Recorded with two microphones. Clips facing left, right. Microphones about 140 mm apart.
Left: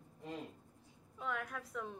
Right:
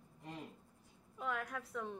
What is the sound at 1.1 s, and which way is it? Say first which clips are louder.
Speech: right 1 dB; centre (ahead or behind).